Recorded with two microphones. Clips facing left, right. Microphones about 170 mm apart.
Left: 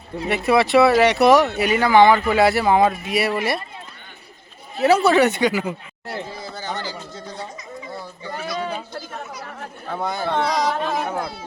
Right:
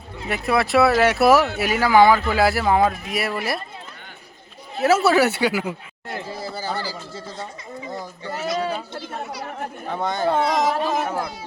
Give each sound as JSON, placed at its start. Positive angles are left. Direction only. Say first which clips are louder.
{"t": 0.3, "sound": "speech", "louder": "left 3 dB", "side_deg": 0}
{"t": 4.8, "sound": "speech", "louder": "left 2 dB", "side_deg": -5}
{"t": 8.5, "sound": "speech", "louder": "right 2 dB", "side_deg": -5}
{"t": 9.9, "sound": "speech", "louder": "right 1 dB", "side_deg": 5}
{"t": 10.4, "sound": "carnatic music", "louder": "right 1 dB", "side_deg": -20}
{"t": 10.7, "sound": "speech", "louder": "right 1 dB", "side_deg": -5}